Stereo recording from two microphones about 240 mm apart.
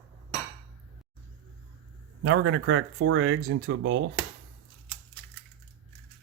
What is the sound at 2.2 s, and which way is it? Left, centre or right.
Speech, right.